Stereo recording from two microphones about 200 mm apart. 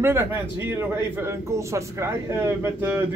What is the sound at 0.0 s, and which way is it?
A man's voice, 10° right (ahead or behind).